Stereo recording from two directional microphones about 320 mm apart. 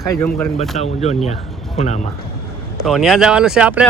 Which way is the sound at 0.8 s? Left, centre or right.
Centre.